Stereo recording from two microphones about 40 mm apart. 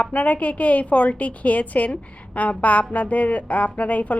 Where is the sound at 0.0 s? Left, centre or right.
Left.